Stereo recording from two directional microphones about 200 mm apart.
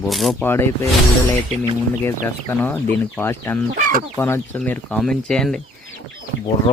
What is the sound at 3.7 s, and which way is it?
Speech, 40° right (ahead or behind).